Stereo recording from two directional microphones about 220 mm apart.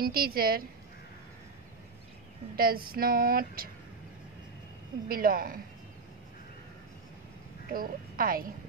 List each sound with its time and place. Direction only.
0.0 s a woman's voice: 45° right (ahead or behind)
2.5 s speech: 40° right (ahead or behind)
5.0 s speech: 40° right (ahead or behind)
7.7 s speech: 40° right (ahead or behind)